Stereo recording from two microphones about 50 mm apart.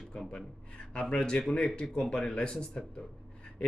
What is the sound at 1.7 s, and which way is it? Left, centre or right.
Speech, centre.